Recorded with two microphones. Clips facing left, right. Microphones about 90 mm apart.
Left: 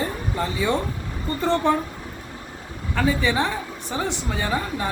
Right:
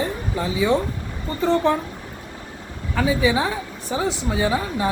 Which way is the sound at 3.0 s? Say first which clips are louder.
Right 2 dB; 10° right (ahead or behind).